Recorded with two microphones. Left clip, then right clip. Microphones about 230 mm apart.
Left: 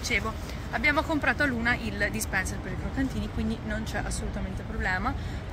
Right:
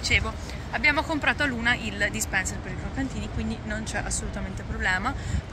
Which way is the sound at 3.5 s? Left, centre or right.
Centre.